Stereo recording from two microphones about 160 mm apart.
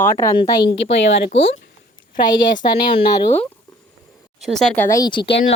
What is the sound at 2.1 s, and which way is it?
Speech, 55° left (ahead or behind).